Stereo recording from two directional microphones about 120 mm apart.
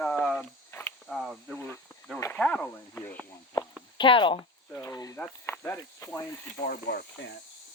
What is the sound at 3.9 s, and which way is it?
Speech, 40° left (ahead or behind).